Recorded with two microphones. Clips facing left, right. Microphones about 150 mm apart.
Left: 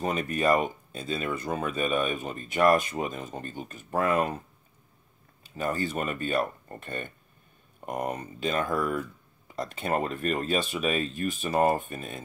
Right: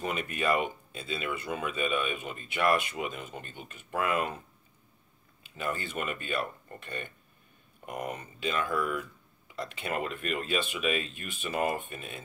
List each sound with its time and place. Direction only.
0.0 s speech: 40° left (ahead or behind)
5.4 s speech: 40° left (ahead or behind)